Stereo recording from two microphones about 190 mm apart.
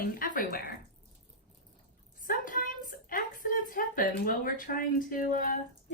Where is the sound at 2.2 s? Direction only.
45° left (ahead or behind).